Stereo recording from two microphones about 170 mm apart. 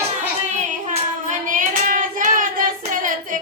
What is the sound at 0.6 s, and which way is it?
Hands, 45° right (ahead or behind).